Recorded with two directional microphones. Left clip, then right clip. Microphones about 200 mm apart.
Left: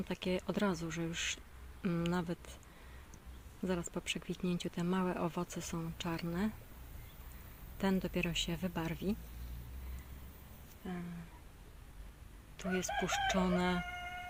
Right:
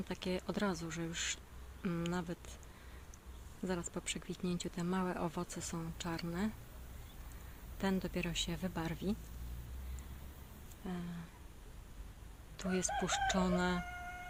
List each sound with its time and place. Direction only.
0.1 s speech: 20° left (ahead or behind)
3.7 s speech: 15° left (ahead or behind)
7.8 s speech: 20° left (ahead or behind)
10.8 s speech: centre (ahead or behind)
12.5 s speech: centre (ahead or behind)